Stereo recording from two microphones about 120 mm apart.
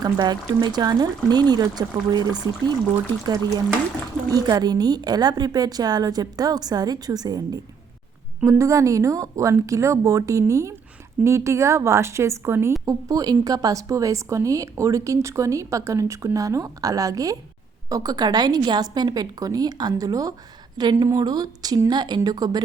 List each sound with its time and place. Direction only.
0.0 s a woman's voice: 35° right (ahead or behind)